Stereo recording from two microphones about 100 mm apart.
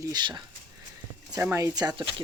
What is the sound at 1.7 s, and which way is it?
Speech, 45° right (ahead or behind).